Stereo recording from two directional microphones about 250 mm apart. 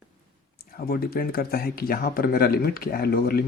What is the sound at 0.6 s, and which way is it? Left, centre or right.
Speech, left.